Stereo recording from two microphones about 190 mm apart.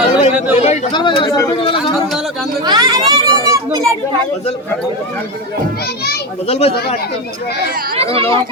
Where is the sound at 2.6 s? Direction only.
20° right (ahead or behind).